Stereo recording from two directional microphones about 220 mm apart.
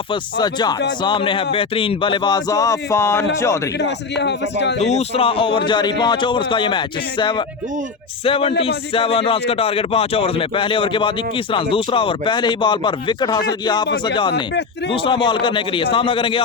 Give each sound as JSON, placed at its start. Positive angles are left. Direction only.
{"t": 0.1, "sound": "speech", "side_deg": 20}
{"t": 4.2, "sound": "speech", "side_deg": 50}
{"t": 4.8, "sound": "speech", "side_deg": 30}